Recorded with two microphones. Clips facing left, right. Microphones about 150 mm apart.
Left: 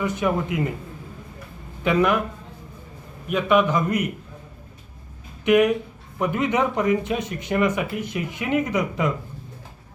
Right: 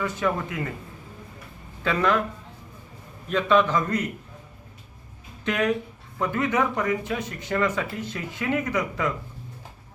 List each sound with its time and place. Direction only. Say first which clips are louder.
0.0 s a man's voice: left 3 dB; 15° left (ahead or behind)
1.8 s a man's voice: left 3 dB; 15° left (ahead or behind)
3.2 s a man's voice: left 1 dB; 15° left (ahead or behind)
5.5 s a man's voice: left 7 dB; 15° left (ahead or behind)